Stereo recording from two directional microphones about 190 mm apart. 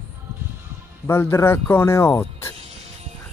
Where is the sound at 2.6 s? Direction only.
35° right (ahead or behind).